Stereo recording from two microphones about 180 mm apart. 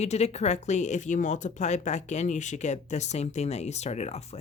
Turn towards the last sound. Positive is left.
turn(degrees=35)  # may be behind; listen again after turning